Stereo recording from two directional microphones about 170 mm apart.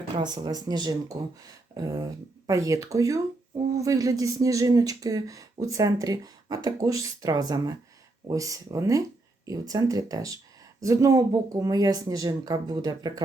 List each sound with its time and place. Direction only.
0.2 s speech: 25° right (ahead or behind)